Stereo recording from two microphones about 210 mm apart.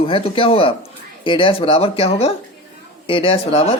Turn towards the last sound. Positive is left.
turn(degrees=25)  # may be behind; listen again after turning